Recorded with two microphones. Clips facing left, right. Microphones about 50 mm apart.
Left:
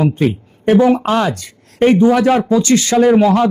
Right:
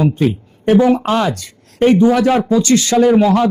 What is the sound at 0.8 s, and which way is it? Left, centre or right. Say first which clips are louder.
A man's voice: left 1 dB; left.